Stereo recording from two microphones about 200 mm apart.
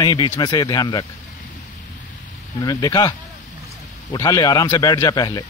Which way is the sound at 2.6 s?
20° left (ahead or behind).